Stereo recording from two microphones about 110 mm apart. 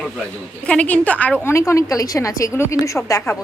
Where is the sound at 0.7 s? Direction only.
10° left (ahead or behind).